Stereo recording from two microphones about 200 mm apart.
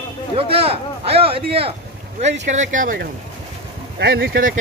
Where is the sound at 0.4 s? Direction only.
30° right (ahead or behind).